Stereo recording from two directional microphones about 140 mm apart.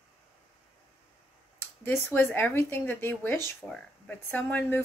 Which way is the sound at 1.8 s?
15° left (ahead or behind).